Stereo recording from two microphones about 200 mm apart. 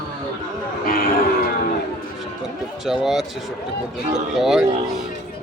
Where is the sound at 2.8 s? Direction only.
Centre (ahead or behind).